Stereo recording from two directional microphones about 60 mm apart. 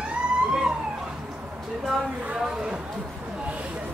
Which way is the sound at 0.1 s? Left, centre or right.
Centre.